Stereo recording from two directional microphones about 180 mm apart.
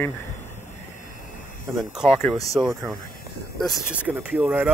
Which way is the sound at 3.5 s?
5° right (ahead or behind).